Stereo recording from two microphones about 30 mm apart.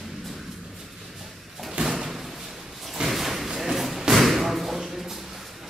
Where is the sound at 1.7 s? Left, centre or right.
Centre.